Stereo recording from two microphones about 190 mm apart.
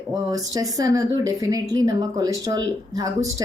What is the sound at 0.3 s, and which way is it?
A woman's voice, 20° right (ahead or behind).